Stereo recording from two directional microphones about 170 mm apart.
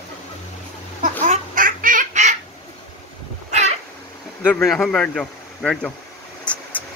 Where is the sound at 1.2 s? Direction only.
50° right (ahead or behind).